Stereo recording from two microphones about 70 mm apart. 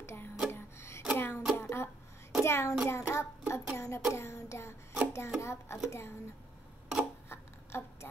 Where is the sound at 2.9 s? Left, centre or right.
Left.